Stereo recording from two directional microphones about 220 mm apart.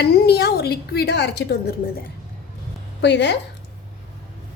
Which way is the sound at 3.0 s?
50° left (ahead or behind).